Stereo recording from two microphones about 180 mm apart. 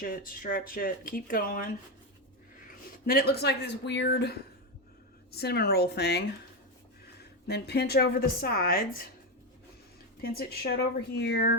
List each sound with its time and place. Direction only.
0.0 s speech: 50° left (ahead or behind)
3.1 s a woman's voice: 60° left (ahead or behind)
7.4 s a woman's voice: 65° left (ahead or behind)
10.2 s a woman's voice: 60° left (ahead or behind)